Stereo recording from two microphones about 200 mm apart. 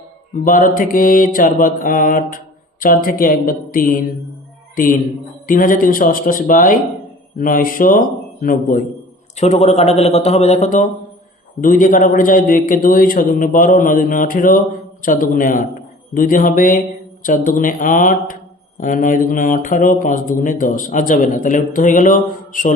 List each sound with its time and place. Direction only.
0.4 s a man's voice: 45° left (ahead or behind)